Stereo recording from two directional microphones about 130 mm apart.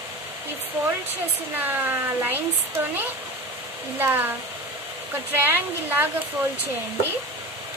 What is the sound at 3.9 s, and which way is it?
Speech, 15° right (ahead or behind).